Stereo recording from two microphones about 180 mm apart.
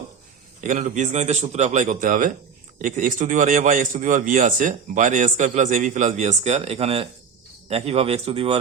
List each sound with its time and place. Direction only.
0.6 s a man's voice: 45° right (ahead or behind)